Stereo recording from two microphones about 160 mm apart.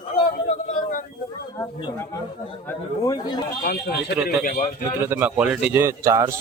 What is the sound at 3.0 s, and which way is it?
Speech, 25° left (ahead or behind).